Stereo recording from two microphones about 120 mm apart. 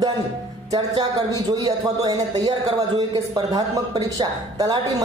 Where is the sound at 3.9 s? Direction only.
35° right (ahead or behind).